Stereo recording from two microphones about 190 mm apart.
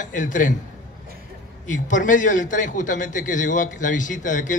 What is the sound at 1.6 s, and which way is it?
A man's voice, 40° left (ahead or behind).